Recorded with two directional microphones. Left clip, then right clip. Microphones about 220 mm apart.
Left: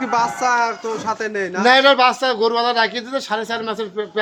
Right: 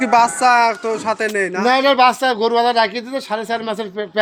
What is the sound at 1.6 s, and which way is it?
Speech, 10° right (ahead or behind).